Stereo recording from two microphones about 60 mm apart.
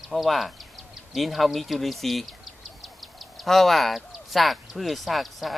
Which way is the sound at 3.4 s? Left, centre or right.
Centre.